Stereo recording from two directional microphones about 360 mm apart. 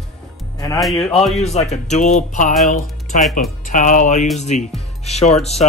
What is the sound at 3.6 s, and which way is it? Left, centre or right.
Speech, left.